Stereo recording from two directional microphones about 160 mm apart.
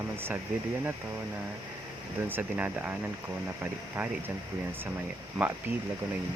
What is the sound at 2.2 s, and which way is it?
Speech, 10° right (ahead or behind).